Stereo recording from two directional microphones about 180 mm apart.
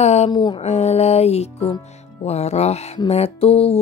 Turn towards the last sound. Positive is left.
turn(degrees=35)  # may be behind; listen again after turning